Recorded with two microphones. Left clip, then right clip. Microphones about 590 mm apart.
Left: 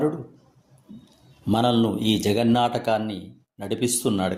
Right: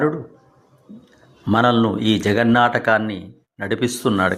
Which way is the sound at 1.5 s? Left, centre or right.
Left.